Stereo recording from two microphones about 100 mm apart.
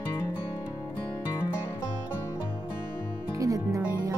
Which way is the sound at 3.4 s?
35° right (ahead or behind).